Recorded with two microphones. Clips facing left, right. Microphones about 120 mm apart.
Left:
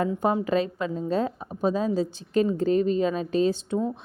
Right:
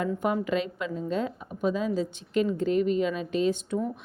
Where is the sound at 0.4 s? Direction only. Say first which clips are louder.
Left 4 dB; 35° left (ahead or behind).